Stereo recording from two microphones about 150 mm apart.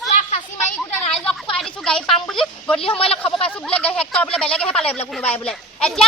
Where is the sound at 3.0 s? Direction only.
40° left (ahead or behind).